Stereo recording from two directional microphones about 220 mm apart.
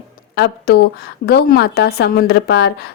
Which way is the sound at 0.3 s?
45° left (ahead or behind).